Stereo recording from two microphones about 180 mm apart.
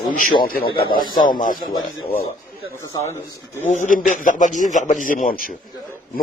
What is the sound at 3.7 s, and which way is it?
A man's voice, 45° left (ahead or behind).